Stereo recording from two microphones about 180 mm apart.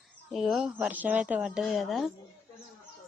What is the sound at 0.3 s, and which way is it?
Speech, centre (ahead or behind).